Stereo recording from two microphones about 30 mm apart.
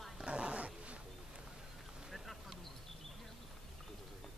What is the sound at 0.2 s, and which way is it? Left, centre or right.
Dog, right.